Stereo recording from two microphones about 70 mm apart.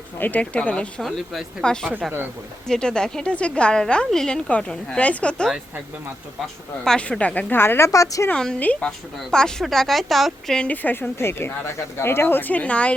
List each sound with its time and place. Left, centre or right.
0.2 s speech: left
1.0 s a woman's voice: centre
6.8 s a woman's voice: centre
7.5 s a woman's voice: left
7.9 s a woman's voice: left
8.5 s speech: centre
9.3 s a woman's voice: centre
10.7 s a woman's voice: left